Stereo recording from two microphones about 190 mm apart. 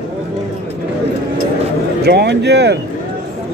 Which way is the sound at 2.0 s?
60° right (ahead or behind).